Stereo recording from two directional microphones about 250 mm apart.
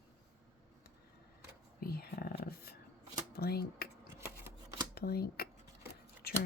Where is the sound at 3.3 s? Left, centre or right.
Left.